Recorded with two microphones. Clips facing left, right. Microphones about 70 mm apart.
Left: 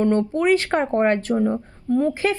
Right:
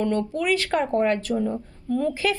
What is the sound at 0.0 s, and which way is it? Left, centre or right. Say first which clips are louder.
Speech: left 5 dB; left.